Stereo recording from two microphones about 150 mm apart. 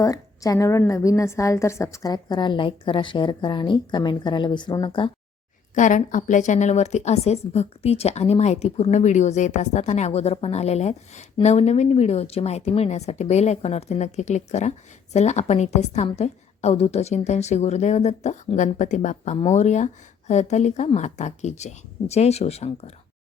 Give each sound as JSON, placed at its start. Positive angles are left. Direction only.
{"t": 0.0, "sound": "a woman's voice", "side_deg": 25}
{"t": 5.7, "sound": "a woman's voice", "side_deg": 55}